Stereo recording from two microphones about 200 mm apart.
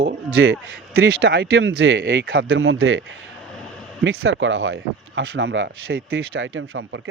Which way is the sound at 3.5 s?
5° left (ahead or behind).